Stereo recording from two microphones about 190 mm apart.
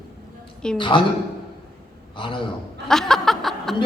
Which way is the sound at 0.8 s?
25° left (ahead or behind).